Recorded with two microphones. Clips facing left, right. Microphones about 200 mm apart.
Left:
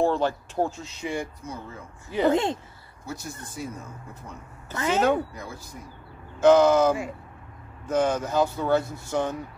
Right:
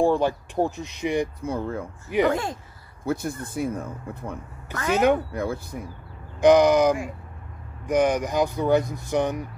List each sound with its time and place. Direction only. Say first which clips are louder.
0.0 s speech: right 3 dB; 15° right (ahead or behind)
1.4 s speech: right 10 dB; 60° right (ahead or behind)
2.3 s speech: left 4 dB; 25° left (ahead or behind)
3.1 s speech: right 9 dB; 55° right (ahead or behind)
4.9 s speech: right 3 dB; 15° right (ahead or behind)
5.3 s speech: right 11 dB; 60° right (ahead or behind)
6.4 s speech: right 1 dB; 15° right (ahead or behind)